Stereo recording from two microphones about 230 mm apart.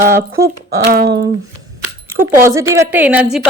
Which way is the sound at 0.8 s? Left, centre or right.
Right.